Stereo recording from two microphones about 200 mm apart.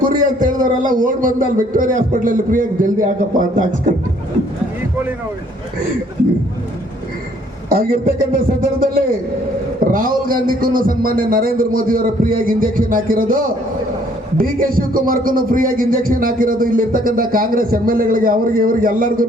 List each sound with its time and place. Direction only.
0.0 s a man's voice: 40° right (ahead or behind)
7.7 s speech: 45° right (ahead or behind)
9.8 s speech: 45° right (ahead or behind)